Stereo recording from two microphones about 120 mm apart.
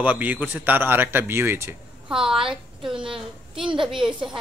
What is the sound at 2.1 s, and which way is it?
A woman's voice, 5° right (ahead or behind).